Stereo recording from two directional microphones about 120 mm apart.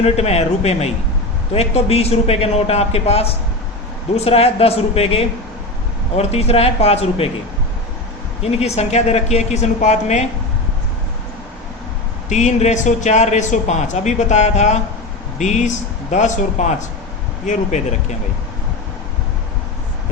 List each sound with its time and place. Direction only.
0.0 s speech: 60° left (ahead or behind)
8.4 s speech: 60° left (ahead or behind)
12.3 s speech: 75° left (ahead or behind)